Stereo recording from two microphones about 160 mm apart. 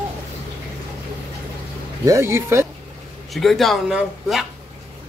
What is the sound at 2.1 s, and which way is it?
Speech, 15° right (ahead or behind).